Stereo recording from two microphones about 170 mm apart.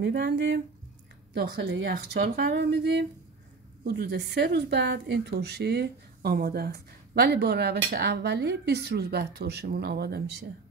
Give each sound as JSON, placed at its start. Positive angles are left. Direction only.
{"t": 0.0, "sound": "speech", "side_deg": -90}
{"t": 1.3, "sound": "speech", "side_deg": -75}
{"t": 3.8, "sound": "speech", "side_deg": -70}